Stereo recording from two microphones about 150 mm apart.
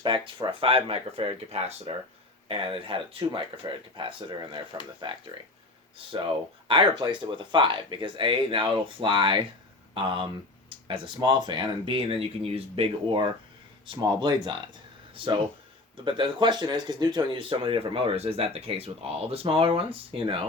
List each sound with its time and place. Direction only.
0.0 s speech: 30° right (ahead or behind)
6.7 s speech: 35° right (ahead or behind)